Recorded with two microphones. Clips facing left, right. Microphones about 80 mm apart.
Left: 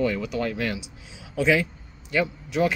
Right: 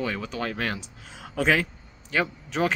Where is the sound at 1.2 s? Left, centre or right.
Right.